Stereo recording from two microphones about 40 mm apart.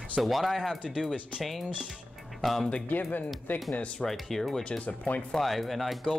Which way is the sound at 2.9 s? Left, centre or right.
Left.